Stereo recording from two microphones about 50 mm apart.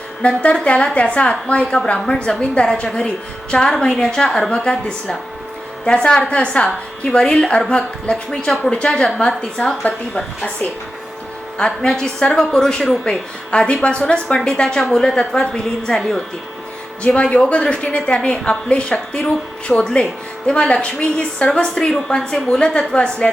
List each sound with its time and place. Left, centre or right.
0.2 s a woman's voice: left
8.3 s a woman's voice: centre
11.5 s a woman's voice: centre
13.1 s a woman's voice: left
17.2 s a woman's voice: left